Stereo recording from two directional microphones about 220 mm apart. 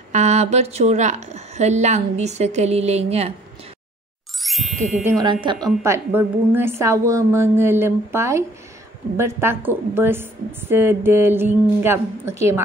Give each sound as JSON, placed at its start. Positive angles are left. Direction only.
{"t": 0.1, "sound": "a woman's voice", "side_deg": -30}
{"t": 4.4, "sound": "ding", "side_deg": 0}
{"t": 5.2, "sound": "speech", "side_deg": -20}
{"t": 5.8, "sound": "a woman's voice", "side_deg": -10}